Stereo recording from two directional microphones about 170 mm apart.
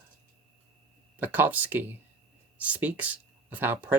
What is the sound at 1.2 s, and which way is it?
Speech, 10° right (ahead or behind).